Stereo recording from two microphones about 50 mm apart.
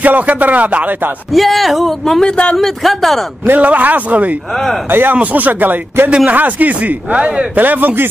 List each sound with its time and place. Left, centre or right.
0.0 s speech: right
1.3 s speech: centre
2.2 s speech: left
2.5 s speech: centre
3.5 s speech: right
4.5 s speech: centre
4.8 s speech: right
5.1 s speech: right
6.0 s speech: right
7.5 s speech: right